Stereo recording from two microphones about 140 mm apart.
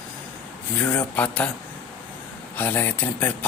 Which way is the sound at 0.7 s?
10° left (ahead or behind).